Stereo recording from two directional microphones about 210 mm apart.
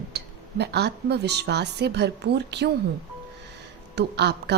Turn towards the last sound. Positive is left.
turn(degrees=-50)  # may be behind; listen again after turning